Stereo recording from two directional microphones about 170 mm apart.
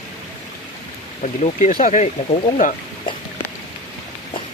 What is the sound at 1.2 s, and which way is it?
Speech, 45° left (ahead or behind).